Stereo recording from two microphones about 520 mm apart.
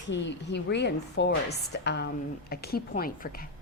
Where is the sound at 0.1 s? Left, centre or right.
Centre.